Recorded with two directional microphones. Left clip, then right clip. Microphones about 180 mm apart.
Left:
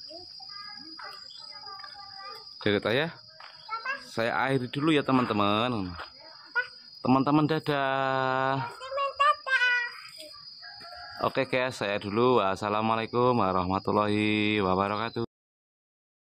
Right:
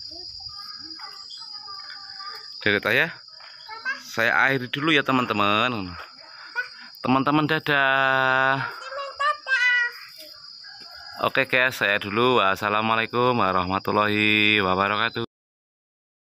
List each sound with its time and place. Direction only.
2.6 s speech: 5° left (ahead or behind)
9.2 s child singing: 25° left (ahead or behind)
11.1 s speech: centre (ahead or behind)